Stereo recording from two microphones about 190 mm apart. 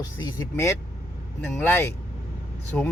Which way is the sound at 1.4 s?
10° left (ahead or behind).